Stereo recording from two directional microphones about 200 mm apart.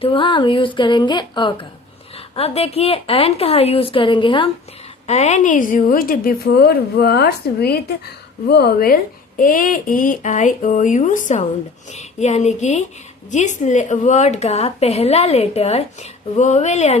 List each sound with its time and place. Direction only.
0.0 s a woman's voice: 25° left (ahead or behind)